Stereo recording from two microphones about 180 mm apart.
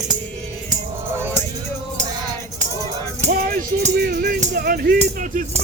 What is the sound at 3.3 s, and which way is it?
Music, 55° right (ahead or behind).